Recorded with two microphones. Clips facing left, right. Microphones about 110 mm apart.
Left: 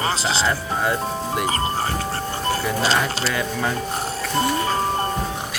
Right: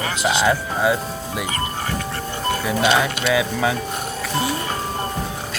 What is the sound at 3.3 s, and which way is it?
Speech, 5° right (ahead or behind).